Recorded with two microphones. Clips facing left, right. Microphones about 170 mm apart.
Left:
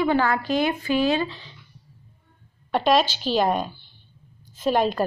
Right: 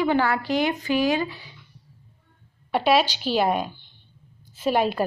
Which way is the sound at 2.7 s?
10° right (ahead or behind).